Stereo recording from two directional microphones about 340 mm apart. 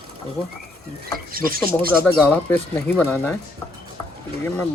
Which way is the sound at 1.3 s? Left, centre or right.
Right.